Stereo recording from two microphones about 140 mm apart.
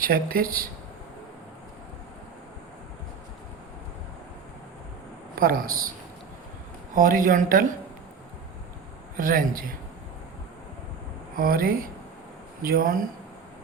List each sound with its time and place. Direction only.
0.0 s speech: 90° right
5.3 s speech: 90° right
6.9 s a woman's voice: 70° right (ahead or behind)
9.1 s a woman's voice: 75° right (ahead or behind)
11.3 s speech: 90° right